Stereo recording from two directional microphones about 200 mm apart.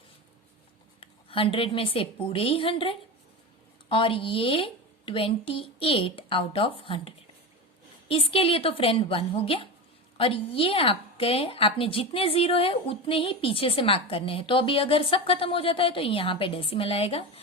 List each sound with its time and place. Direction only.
0.9 s a woman's voice: 25° left (ahead or behind)